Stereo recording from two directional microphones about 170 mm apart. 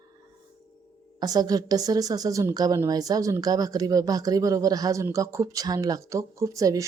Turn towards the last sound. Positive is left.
turn(degrees=-20)  # may be behind; listen again after turning